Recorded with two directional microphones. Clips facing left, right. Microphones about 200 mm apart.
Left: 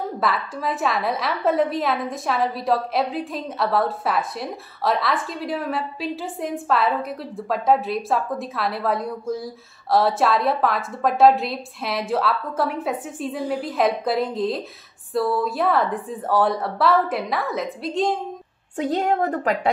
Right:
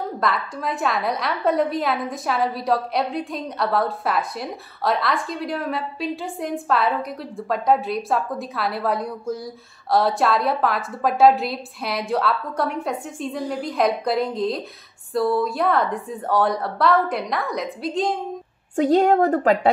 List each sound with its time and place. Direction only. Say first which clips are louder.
0.2 s a woman's voice: even; centre (ahead or behind)
18.8 s a woman's voice: right 5 dB; 40° right (ahead or behind)